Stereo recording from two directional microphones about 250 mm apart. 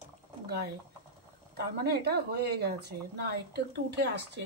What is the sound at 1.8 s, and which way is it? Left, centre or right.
Speech, right.